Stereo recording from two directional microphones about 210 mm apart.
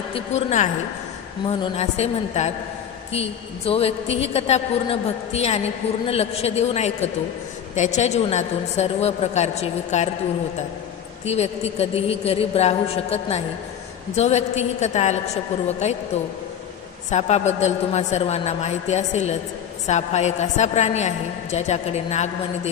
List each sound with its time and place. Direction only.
0.1 s a woman's voice: 35° left (ahead or behind)
11.2 s a woman's voice: 30° left (ahead or behind)
17.1 s a woman's voice: 30° left (ahead or behind)